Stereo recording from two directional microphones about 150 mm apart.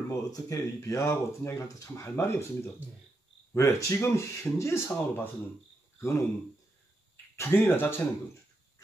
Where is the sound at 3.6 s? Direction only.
20° left (ahead or behind).